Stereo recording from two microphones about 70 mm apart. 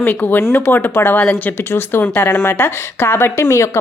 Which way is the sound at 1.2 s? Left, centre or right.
Centre.